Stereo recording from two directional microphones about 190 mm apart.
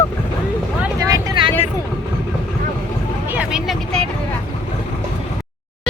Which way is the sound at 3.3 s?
5° right (ahead or behind).